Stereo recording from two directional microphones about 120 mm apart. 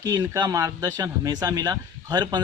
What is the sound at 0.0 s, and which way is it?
Speech, 30° right (ahead or behind).